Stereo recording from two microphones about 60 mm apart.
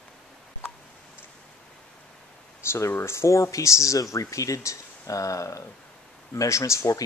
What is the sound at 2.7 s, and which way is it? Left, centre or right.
Speech, left.